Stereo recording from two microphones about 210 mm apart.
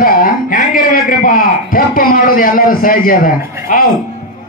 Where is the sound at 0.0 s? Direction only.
40° left (ahead or behind).